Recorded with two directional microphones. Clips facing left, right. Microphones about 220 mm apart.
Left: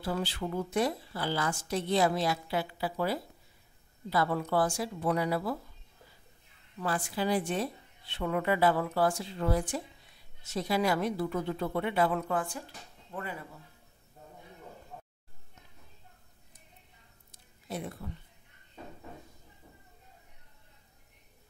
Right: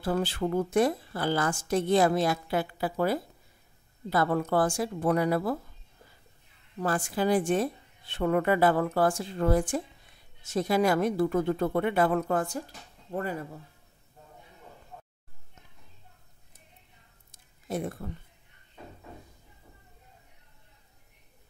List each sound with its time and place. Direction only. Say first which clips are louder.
0.0 s a woman's voice: right 5 dB; 50° right (ahead or behind)
6.8 s a woman's voice: right 4 dB; 50° right (ahead or behind)
17.3 s a sound: right 6 dB; 50° right (ahead or behind)